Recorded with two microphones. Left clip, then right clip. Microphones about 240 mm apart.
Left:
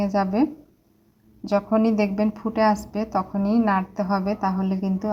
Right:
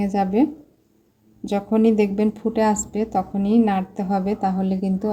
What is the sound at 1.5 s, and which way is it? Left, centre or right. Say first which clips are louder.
Speech: right 1 dB; centre.